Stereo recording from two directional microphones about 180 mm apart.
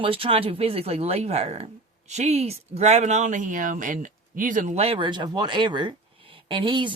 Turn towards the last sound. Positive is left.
turn(degrees=-25)  # may be behind; listen again after turning